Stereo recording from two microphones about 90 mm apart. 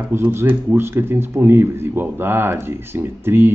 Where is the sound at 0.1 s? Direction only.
25° right (ahead or behind).